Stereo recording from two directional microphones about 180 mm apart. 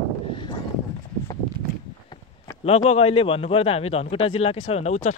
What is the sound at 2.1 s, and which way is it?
A man's voice, 30° left (ahead or behind).